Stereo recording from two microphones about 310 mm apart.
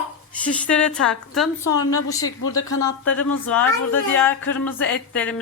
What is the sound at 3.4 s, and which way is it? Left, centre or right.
Speech, centre.